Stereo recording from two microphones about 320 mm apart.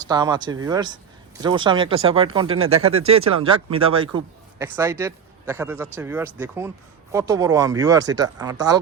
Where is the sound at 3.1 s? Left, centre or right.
Centre.